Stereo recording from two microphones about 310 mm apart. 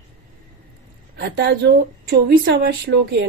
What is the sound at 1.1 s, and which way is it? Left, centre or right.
Speech, right.